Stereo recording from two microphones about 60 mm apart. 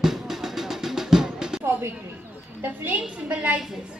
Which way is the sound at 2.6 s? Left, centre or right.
Right.